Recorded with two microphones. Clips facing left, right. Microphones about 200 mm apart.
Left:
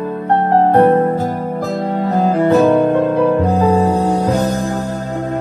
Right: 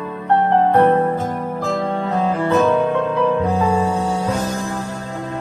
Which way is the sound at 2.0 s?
35° left (ahead or behind).